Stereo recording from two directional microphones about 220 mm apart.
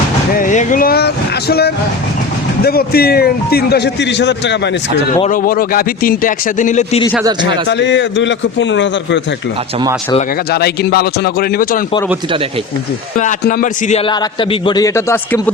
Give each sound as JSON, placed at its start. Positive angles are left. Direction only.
{"t": 0.3, "sound": "a man's voice", "side_deg": 35}
{"t": 5.2, "sound": "speech", "side_deg": 40}
{"t": 7.7, "sound": "a man's voice", "side_deg": 55}
{"t": 10.5, "sound": "a man's voice", "side_deg": 45}
{"t": 13.1, "sound": "a man's voice", "side_deg": 35}